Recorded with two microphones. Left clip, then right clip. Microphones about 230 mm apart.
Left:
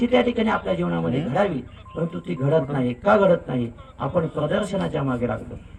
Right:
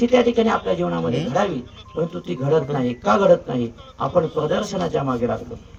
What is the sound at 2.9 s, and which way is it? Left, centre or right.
Speech, centre.